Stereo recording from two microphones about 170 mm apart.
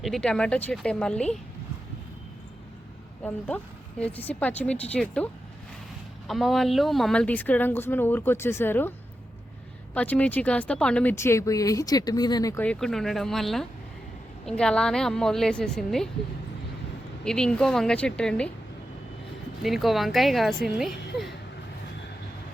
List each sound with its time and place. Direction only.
0.0 s a woman's voice: 5° left (ahead or behind)
3.2 s speech: 10° left (ahead or behind)
9.9 s speech: 10° left (ahead or behind)
12.6 s a woman's voice: centre (ahead or behind)
17.2 s a woman's voice: 5° left (ahead or behind)
19.6 s a woman's voice: centre (ahead or behind)